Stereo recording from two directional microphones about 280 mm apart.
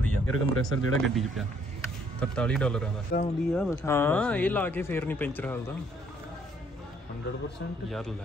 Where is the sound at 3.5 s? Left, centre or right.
Centre.